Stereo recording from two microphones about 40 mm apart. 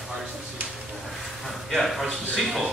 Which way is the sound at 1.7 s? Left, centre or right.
Centre.